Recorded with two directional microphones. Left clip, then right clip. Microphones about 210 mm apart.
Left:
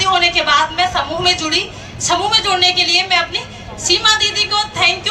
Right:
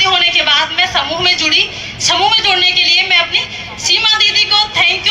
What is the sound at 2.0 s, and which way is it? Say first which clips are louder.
Speech: right 3 dB; 55° left (ahead or behind).